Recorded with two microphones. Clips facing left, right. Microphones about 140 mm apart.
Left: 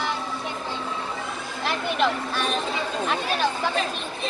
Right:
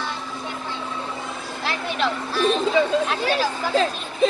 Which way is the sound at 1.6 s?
Centre (ahead or behind).